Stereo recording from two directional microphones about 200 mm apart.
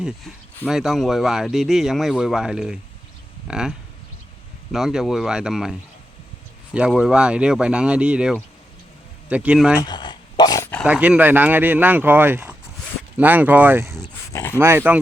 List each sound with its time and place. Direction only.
0.7 s speech: centre (ahead or behind)
6.7 s speech: 5° right (ahead or behind)
9.8 s a sound: 20° left (ahead or behind)
10.8 s speech: 5° right (ahead or behind)
14.3 s speech: 10° left (ahead or behind)
14.6 s speech: 10° right (ahead or behind)